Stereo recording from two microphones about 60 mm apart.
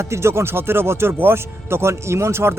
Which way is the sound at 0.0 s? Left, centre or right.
Right.